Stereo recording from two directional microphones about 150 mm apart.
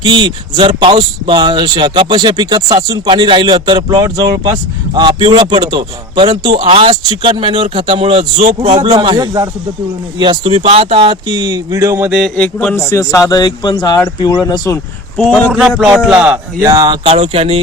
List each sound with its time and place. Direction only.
0.0 s a man's voice: 30° right (ahead or behind)
12.1 s a man's voice: 5° left (ahead or behind); by 14.8 s 25° left (ahead or behind)
15.2 s a man's voice: centre (ahead or behind)
16.6 s a man's voice: 25° right (ahead or behind)